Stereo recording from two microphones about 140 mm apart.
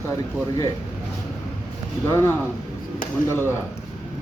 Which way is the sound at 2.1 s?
20° left (ahead or behind).